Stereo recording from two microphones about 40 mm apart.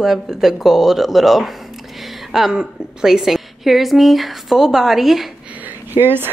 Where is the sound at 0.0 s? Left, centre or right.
Centre.